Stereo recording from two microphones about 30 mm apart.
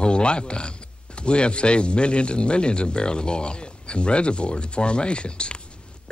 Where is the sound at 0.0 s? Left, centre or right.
Left.